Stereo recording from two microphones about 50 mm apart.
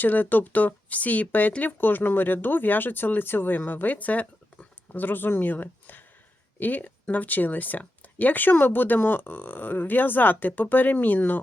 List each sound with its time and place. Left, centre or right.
0.0 s speech: left